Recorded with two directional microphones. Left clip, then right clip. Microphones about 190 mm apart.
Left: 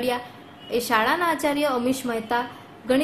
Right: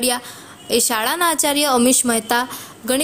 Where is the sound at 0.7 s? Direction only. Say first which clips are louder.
Right 2 dB; 45° right (ahead or behind).